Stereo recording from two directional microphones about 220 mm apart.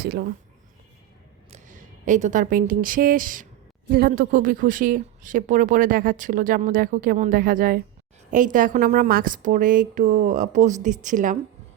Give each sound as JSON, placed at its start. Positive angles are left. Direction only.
{"t": 0.0, "sound": "speech", "side_deg": -45}
{"t": 1.5, "sound": "speech", "side_deg": -35}